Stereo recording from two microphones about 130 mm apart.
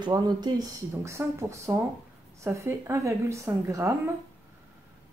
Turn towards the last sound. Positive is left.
turn(degrees=-20)  # may be behind; listen again after turning